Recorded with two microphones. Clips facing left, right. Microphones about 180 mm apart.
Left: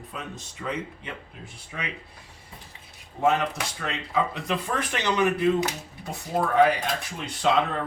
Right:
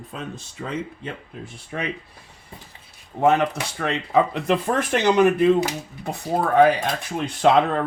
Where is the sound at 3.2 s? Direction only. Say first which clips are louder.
Right 5 dB; 65° right (ahead or behind).